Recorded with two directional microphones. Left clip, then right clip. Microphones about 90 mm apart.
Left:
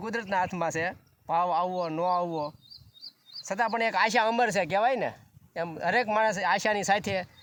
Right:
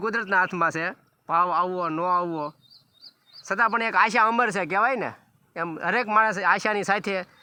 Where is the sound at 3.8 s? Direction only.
80° left.